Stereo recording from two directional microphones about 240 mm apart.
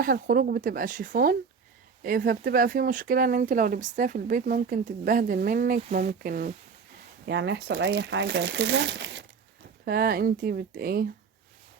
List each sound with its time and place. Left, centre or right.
0.0 s speech: right
7.3 s speech: right